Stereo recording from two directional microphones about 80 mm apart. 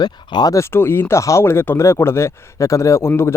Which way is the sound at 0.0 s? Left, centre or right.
Left.